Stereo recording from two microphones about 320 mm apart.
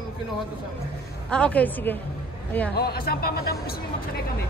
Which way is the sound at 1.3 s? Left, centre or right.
Centre.